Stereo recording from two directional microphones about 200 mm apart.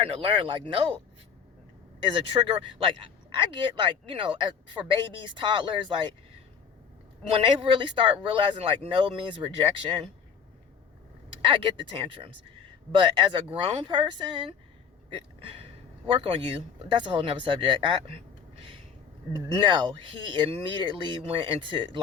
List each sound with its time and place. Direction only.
0.0 s speech: 25° right (ahead or behind)
2.0 s speech: 25° right (ahead or behind)
7.3 s speech: 25° right (ahead or behind)
11.4 s speech: 25° right (ahead or behind)
16.0 s speech: 25° right (ahead or behind)